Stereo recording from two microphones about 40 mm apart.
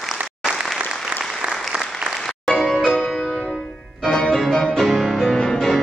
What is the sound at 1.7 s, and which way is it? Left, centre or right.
Applause, centre.